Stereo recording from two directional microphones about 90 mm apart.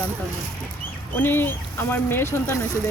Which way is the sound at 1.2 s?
25° left (ahead or behind).